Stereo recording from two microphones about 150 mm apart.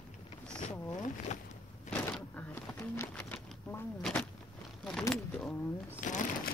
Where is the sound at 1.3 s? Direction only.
50° left (ahead or behind).